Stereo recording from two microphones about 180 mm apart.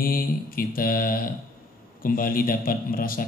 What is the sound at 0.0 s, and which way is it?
Mantra, 55° left (ahead or behind).